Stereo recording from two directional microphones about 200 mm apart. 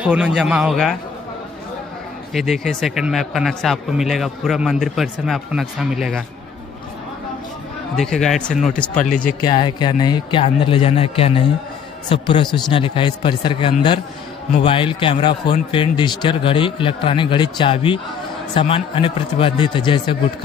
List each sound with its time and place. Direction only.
0.0 s a man's voice: 5° right (ahead or behind)
2.3 s a man's voice: centre (ahead or behind)
7.9 s a man's voice: centre (ahead or behind)
8.9 s speech: 40° left (ahead or behind)
9.4 s a man's voice: 25° left (ahead or behind)